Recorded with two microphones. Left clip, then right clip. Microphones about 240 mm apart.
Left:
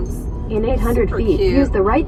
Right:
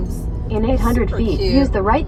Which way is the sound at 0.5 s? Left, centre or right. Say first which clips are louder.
Even; right.